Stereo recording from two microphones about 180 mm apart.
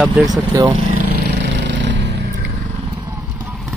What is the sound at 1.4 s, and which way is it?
Vehicle, 80° right.